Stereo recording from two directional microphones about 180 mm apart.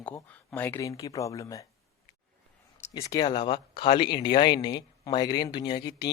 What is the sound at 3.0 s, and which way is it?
Speech, 20° left (ahead or behind).